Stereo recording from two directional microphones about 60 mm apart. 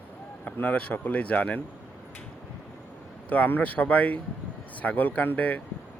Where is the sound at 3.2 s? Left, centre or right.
Left.